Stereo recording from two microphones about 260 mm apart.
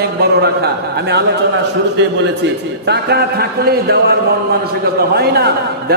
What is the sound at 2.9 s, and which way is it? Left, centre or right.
A man's voice, right.